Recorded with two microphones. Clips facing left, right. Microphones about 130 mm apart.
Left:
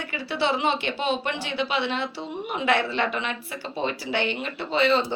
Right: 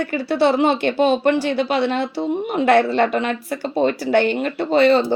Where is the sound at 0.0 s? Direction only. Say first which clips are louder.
Right 9 dB; 40° right (ahead or behind).